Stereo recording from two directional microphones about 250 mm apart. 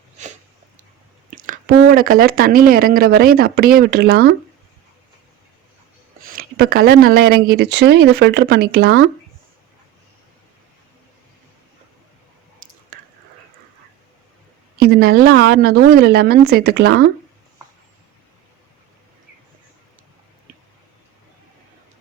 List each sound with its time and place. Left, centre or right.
1.4 s speech: right
6.2 s speech: right
12.6 s a sound: right
14.8 s speech: right